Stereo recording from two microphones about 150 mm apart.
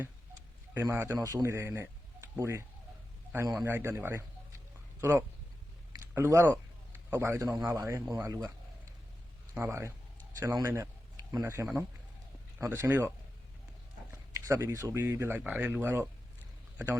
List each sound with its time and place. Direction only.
0.7 s a man's voice: 15° right (ahead or behind)
9.6 s a man's voice: 20° right (ahead or behind)